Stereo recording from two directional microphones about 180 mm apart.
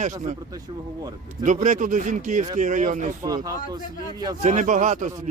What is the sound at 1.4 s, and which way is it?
A man's voice, 45° right (ahead or behind).